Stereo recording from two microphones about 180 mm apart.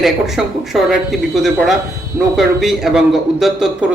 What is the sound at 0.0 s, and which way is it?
A man's voice, centre (ahead or behind).